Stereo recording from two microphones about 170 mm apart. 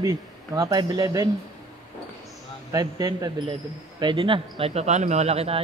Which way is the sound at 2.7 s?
20° right (ahead or behind).